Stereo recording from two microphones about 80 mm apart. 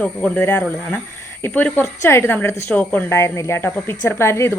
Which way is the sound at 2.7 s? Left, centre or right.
Centre.